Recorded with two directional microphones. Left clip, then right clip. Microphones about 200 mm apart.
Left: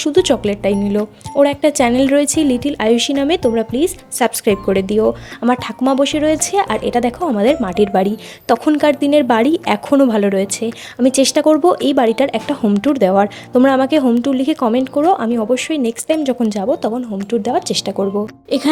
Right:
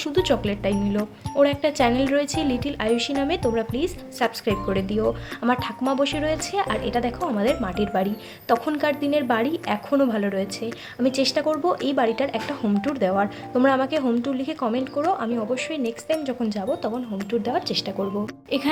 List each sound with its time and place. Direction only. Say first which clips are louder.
0.0 s a woman's voice: left 8 dB; 35° left (ahead or behind)